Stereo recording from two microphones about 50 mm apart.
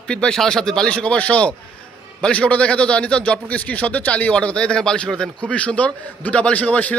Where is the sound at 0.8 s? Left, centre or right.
Left.